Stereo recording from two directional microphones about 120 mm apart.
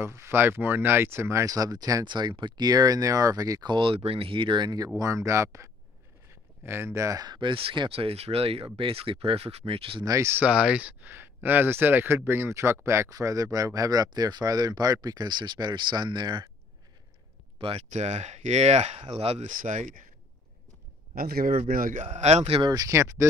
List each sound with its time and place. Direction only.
0.0 s speech: 20° right (ahead or behind); by 10.0 s 50° right (ahead or behind)
10.0 s speech: 25° right (ahead or behind)
10.4 s speech: 10° right (ahead or behind); by 16.4 s 40° right (ahead or behind)
17.6 s speech: 50° right (ahead or behind)
17.9 s speech: 70° right (ahead or behind); by 20.0 s 90° right
22.0 s speech: 65° right (ahead or behind)
22.6 s speech: 30° right (ahead or behind)